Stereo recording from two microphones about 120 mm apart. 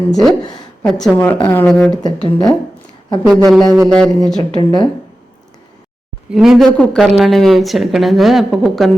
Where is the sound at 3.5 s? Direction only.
5° left (ahead or behind).